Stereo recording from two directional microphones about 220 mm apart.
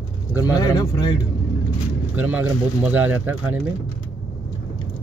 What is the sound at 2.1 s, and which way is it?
Speech, 5° right (ahead or behind).